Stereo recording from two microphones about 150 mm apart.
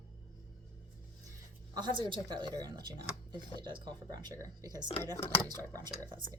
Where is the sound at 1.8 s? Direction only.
35° right (ahead or behind).